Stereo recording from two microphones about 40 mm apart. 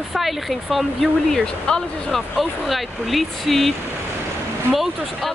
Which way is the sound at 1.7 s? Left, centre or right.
Left.